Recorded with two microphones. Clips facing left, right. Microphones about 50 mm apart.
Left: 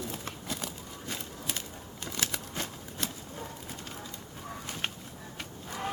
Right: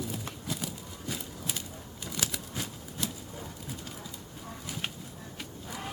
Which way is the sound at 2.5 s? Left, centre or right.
Left.